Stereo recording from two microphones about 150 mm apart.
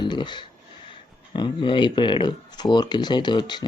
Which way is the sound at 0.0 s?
30° left (ahead or behind).